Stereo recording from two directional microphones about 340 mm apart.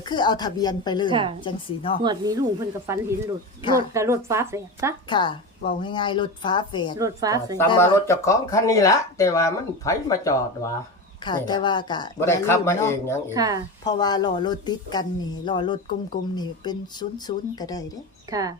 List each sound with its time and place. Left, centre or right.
0.1 s speech: centre
2.0 s a woman's voice: centre
5.0 s speech: centre
7.0 s a woman's voice: centre
7.6 s speech: centre
13.3 s a woman's voice: centre
13.8 s speech: centre
18.3 s a woman's voice: centre